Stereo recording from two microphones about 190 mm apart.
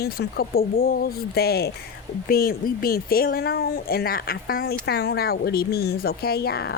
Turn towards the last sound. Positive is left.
turn(degrees=55)  # may be behind; listen again after turning